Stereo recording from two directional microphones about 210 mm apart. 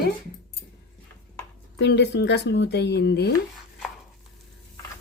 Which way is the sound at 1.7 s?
55° left (ahead or behind).